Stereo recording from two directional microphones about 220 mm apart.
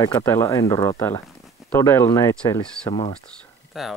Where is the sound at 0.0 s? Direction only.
15° left (ahead or behind).